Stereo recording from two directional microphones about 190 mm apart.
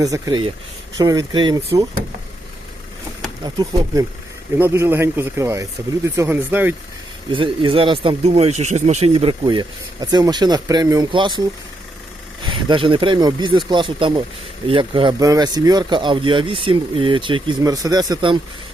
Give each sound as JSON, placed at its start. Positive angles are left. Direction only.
{"t": 0.0, "sound": "speech", "side_deg": -20}
{"t": 3.4, "sound": "a man's voice", "side_deg": -20}
{"t": 7.3, "sound": "speech", "side_deg": -25}